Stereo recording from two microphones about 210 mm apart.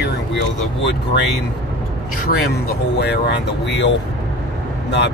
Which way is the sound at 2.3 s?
50° left (ahead or behind).